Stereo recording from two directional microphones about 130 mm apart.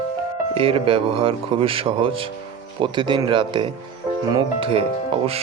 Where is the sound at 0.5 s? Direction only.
45° right (ahead or behind).